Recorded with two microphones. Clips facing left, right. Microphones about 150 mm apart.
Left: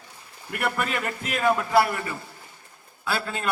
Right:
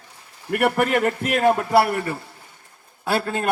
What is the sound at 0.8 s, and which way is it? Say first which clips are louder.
A man's voice: right 8 dB; 60° right (ahead or behind).